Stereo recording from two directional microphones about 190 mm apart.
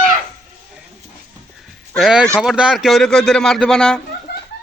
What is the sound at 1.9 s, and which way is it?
Speech, centre (ahead or behind).